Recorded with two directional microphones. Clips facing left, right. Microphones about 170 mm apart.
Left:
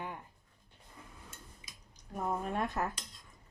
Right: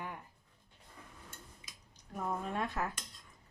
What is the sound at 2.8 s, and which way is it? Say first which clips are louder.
Speech: left 2 dB; 40° left (ahead or behind).